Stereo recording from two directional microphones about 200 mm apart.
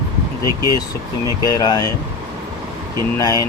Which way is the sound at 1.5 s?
20° left (ahead or behind).